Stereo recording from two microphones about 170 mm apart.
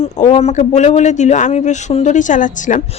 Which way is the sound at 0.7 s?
40° left (ahead or behind).